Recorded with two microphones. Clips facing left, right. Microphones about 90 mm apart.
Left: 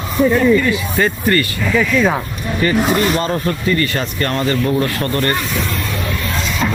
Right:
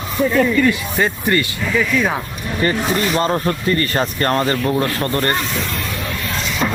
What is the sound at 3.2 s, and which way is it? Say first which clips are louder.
Speech: right 1 dB; 35° right (ahead or behind).